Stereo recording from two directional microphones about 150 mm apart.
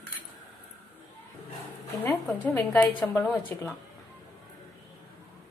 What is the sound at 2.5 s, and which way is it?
A woman's voice, 10° left (ahead or behind).